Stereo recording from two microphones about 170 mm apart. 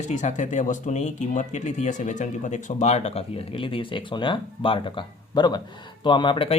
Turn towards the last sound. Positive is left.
turn(degrees=30)  # may be behind; listen again after turning